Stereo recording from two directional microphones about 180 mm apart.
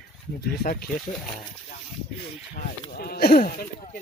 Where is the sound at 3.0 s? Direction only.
55° left (ahead or behind).